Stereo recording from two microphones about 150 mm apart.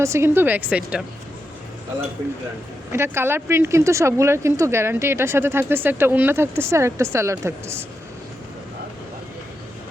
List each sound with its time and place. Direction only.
0.0 s speech: 20° right (ahead or behind)
2.9 s speech: 15° right (ahead or behind)